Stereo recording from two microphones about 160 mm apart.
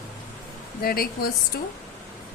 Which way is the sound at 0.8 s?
70° left (ahead or behind).